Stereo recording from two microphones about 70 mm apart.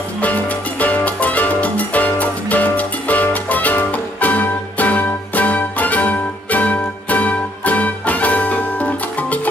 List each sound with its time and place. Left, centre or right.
0.2 s music: left